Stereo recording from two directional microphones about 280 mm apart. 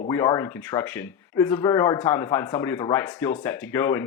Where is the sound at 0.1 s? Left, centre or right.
Centre.